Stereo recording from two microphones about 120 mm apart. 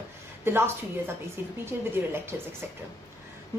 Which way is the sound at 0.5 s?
20° right (ahead or behind).